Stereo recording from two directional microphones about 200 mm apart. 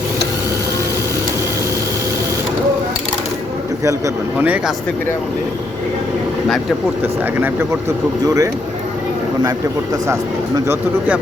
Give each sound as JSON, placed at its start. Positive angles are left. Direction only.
{"t": 3.8, "sound": "speech", "side_deg": -10}
{"t": 7.0, "sound": "speech", "side_deg": -10}
{"t": 10.1, "sound": "speech", "side_deg": -15}